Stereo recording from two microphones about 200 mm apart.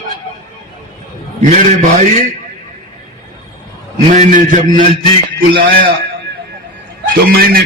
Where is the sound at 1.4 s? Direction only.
40° right (ahead or behind).